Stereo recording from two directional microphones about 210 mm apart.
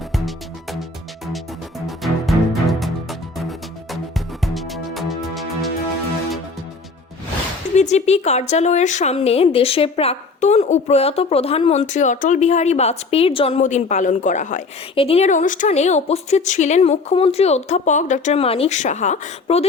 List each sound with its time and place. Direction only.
0.1 s music: centre (ahead or behind)
2.0 s music: centre (ahead or behind)
4.4 s music: centre (ahead or behind)
7.8 s a woman's voice: 30° left (ahead or behind)